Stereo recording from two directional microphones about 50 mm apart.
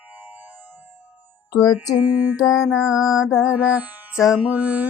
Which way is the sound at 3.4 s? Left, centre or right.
Right.